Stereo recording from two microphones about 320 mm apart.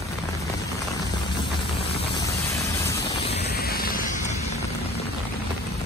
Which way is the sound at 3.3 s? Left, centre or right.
Left.